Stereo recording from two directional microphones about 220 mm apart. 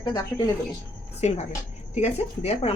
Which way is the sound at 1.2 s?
30° left (ahead or behind).